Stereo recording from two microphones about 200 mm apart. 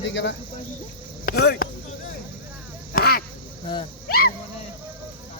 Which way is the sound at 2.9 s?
50° left (ahead or behind).